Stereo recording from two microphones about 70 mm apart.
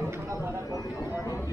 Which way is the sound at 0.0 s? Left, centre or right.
Right.